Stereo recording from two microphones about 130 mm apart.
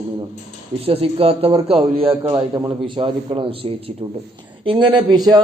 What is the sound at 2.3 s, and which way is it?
A man's voice, 35° right (ahead or behind).